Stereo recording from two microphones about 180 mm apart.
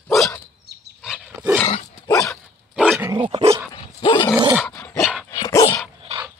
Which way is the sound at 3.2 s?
30° right (ahead or behind).